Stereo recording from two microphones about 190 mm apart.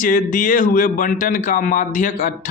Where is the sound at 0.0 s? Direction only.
45° left (ahead or behind).